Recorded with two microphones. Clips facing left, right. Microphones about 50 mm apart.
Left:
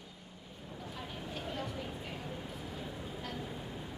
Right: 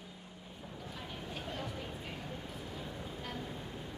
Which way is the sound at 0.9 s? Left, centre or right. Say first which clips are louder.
Left 2 dB; centre.